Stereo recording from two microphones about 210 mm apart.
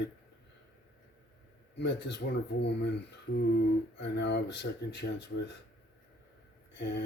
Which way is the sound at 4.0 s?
55° left (ahead or behind).